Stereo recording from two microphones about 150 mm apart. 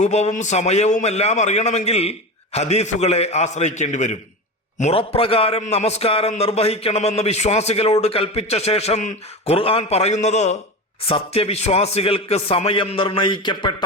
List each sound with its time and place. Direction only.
0.0 s a man's voice: 50° left (ahead or behind)
4.8 s a man's voice: 40° left (ahead or behind)